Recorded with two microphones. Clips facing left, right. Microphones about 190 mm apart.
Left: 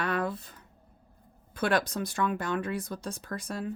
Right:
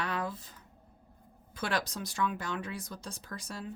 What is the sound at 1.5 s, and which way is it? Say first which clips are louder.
Speech: left 6 dB; 55° left (ahead or behind).